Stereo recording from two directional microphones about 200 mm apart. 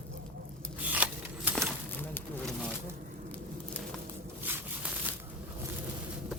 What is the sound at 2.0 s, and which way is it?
Pigeon, 10° left (ahead or behind).